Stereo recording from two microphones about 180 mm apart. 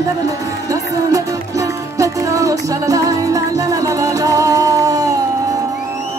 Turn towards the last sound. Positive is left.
turn(degrees=-20)  # may be behind; listen again after turning